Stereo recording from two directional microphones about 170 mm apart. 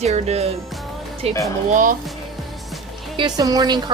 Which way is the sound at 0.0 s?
40° right (ahead or behind).